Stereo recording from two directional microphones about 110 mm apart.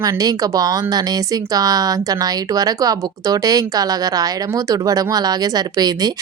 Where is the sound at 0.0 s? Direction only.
35° right (ahead or behind).